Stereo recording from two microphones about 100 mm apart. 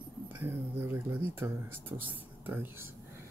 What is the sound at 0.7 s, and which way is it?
Speech, 20° right (ahead or behind).